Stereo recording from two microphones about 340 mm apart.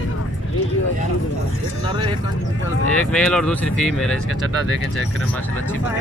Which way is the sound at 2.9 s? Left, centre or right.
Centre.